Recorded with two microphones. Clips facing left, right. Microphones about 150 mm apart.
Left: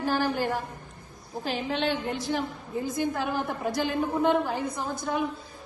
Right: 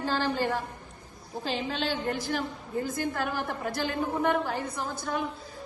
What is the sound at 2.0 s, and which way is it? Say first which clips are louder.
A woman's voice: left 1 dB; 20° left (ahead or behind).